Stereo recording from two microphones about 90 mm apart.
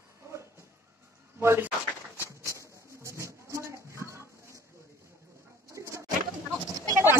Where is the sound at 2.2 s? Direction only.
35° right (ahead or behind).